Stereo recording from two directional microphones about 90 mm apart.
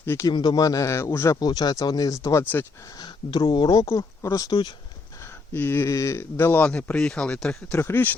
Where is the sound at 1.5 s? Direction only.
50° left (ahead or behind).